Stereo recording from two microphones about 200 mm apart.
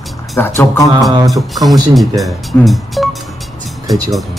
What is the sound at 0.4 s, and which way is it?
Speech, 15° left (ahead or behind).